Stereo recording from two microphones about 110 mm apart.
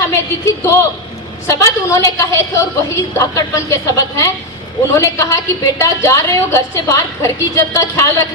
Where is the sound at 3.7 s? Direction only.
30° left (ahead or behind).